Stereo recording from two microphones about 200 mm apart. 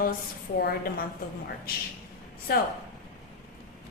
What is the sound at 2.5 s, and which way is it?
Speech, 50° left (ahead or behind).